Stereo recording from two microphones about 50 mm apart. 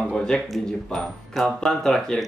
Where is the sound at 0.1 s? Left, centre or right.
Centre.